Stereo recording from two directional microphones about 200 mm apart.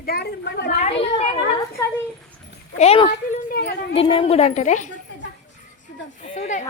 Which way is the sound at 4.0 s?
30° left (ahead or behind).